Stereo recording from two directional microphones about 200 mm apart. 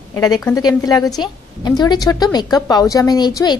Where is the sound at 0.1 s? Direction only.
15° left (ahead or behind).